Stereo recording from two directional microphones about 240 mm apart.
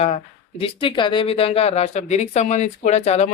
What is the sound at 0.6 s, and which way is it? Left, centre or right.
Speech, left.